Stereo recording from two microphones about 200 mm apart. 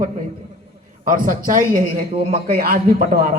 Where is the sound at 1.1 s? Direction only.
40° right (ahead or behind).